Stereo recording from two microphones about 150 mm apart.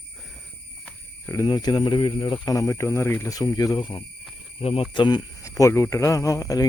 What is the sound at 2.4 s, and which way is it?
Speech, 20° left (ahead or behind).